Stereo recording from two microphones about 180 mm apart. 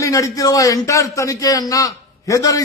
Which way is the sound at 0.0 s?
20° left (ahead or behind).